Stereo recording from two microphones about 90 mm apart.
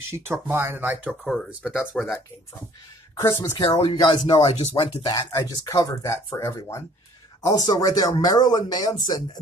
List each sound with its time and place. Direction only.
0.1 s speech: 25° right (ahead or behind)
1.2 s speech: 5° left (ahead or behind)
3.2 s speech: 35° left (ahead or behind)
3.9 s speech: 90° left
5.0 s speech: 40° left (ahead or behind)